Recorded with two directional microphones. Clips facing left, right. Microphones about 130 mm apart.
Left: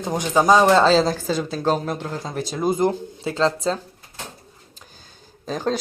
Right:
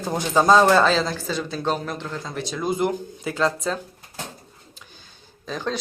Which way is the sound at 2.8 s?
30° left (ahead or behind).